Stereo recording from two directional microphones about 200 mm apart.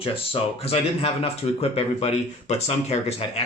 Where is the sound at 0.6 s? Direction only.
30° left (ahead or behind).